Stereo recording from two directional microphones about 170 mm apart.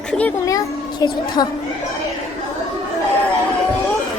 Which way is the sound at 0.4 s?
20° left (ahead or behind).